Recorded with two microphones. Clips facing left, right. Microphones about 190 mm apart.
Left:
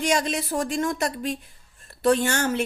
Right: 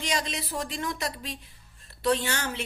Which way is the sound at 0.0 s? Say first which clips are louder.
Left 7 dB; 50° left (ahead or behind).